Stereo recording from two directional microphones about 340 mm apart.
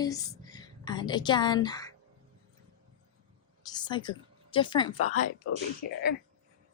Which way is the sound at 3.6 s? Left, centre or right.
Centre.